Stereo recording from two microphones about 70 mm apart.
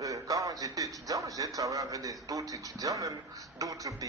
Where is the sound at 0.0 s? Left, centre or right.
Right.